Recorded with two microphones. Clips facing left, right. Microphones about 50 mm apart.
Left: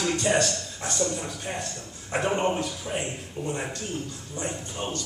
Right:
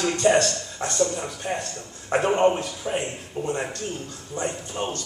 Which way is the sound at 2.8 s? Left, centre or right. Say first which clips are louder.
Right 3 dB; right.